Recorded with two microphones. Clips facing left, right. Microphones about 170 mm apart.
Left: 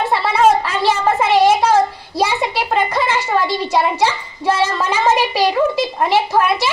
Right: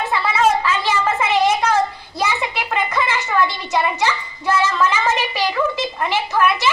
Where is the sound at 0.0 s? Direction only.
35° left (ahead or behind).